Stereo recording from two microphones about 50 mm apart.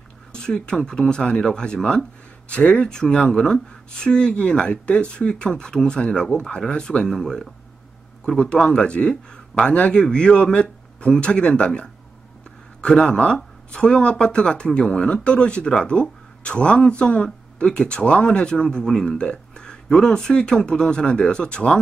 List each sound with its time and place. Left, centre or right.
0.3 s speech: centre
7.1 s speech: centre